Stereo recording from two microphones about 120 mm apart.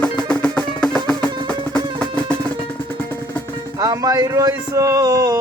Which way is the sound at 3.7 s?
30° right (ahead or behind).